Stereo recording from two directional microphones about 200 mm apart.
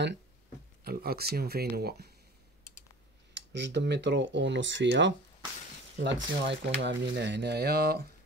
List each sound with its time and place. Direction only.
0.8 s speech: 50° right (ahead or behind)
3.5 s speech: 60° right (ahead or behind)